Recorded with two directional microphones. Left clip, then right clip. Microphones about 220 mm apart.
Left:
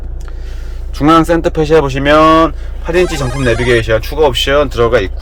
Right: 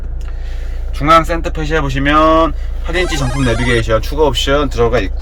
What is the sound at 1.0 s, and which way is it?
Speech, 35° left (ahead or behind).